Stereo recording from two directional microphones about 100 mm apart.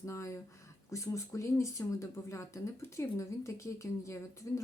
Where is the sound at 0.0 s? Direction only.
30° left (ahead or behind).